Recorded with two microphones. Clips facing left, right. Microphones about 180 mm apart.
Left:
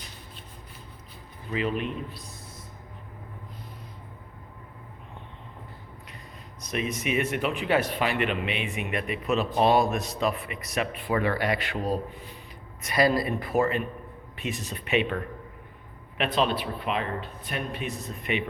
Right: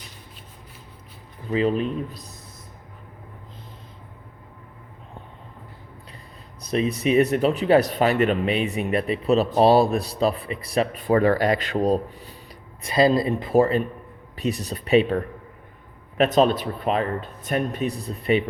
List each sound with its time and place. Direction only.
1.5 s speech: 35° right (ahead or behind)
6.6 s speech: 35° right (ahead or behind)
12.8 s a man's voice: 25° right (ahead or behind)